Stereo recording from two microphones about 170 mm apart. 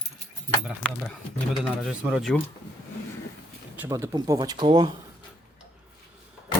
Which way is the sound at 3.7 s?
15° right (ahead or behind).